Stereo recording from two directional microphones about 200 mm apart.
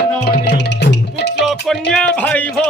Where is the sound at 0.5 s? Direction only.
55° left (ahead or behind).